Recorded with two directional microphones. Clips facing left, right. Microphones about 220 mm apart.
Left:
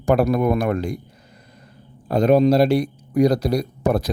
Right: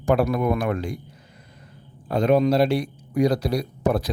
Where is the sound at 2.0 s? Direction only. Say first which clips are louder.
Left 4 dB; 40° left (ahead or behind).